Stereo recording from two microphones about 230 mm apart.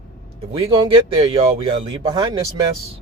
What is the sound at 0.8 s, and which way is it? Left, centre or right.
Speech, right.